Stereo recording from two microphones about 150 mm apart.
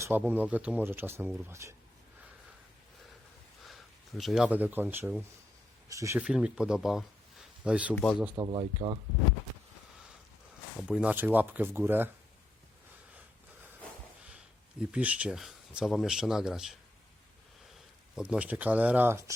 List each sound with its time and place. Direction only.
0.2 s speech: 10° right (ahead or behind)
4.2 s speech: centre (ahead or behind); by 6.1 s 20° right (ahead or behind)
6.1 s speech: 5° right (ahead or behind)
8.4 s speech: 30° right (ahead or behind)
10.8 s speech: 5° right (ahead or behind)
14.3 s speech: 5° right (ahead or behind)
18.2 s speech: 10° right (ahead or behind)